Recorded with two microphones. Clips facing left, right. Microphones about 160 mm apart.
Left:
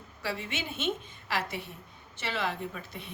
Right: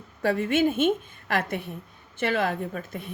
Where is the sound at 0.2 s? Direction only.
50° right (ahead or behind).